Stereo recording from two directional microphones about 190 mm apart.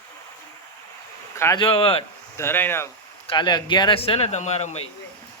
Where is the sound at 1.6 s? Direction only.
30° left (ahead or behind).